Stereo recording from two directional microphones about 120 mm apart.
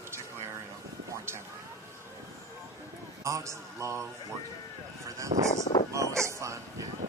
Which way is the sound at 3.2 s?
25° right (ahead or behind).